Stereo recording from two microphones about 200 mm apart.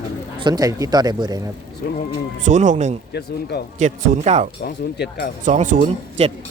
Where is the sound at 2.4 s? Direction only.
40° right (ahead or behind).